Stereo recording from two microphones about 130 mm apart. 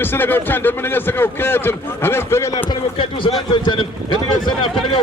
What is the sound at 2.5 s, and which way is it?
Speech, 40° left (ahead or behind).